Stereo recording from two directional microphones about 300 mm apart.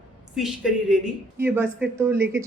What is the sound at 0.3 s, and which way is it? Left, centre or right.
Speech, centre.